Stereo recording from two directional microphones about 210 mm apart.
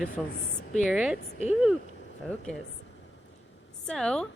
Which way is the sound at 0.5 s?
35° left (ahead or behind).